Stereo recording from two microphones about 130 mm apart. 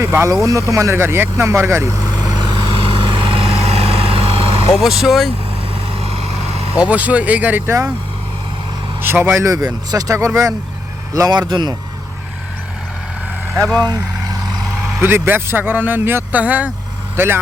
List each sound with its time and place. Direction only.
0.0 s speech: 20° right (ahead or behind)
2.7 s vehicle: 45° right (ahead or behind)
4.7 s speech: centre (ahead or behind)
6.7 s speech: 10° right (ahead or behind)
9.0 s speech: 15° right (ahead or behind)
9.4 s speech: 25° right (ahead or behind)
13.6 s speech: centre (ahead or behind)
13.8 s vehicle: 30° right (ahead or behind)
14.8 s vehicle: 5° right (ahead or behind)
15.1 s speech: 15° right (ahead or behind)